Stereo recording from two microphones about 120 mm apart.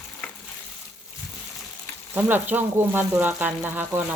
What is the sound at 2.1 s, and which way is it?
Speech, 15° right (ahead or behind).